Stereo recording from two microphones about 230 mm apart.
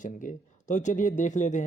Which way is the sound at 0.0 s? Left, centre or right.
Left.